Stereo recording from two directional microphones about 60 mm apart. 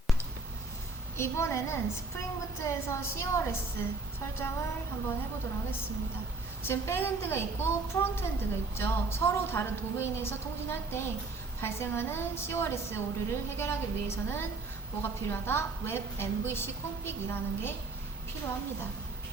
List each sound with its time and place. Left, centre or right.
1.1 s a woman's voice: left
6.6 s a woman's voice: left